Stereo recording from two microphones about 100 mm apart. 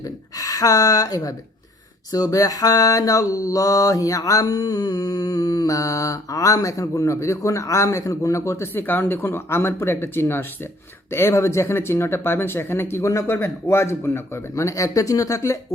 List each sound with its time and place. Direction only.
0.0 s speech: 35° left (ahead or behind)
2.1 s mantra: 35° left (ahead or behind)
11.1 s speech: 25° left (ahead or behind)